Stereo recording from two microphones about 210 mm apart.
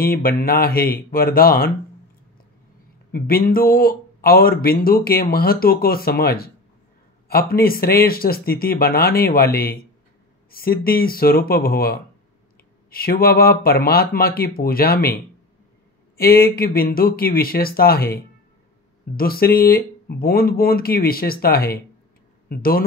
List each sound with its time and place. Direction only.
0.0 s speech: 45° left (ahead or behind)
3.1 s speech: 45° left (ahead or behind)
16.2 s speech: 45° left (ahead or behind)